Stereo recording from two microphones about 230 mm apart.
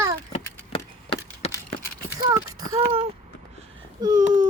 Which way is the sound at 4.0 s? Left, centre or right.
Centre.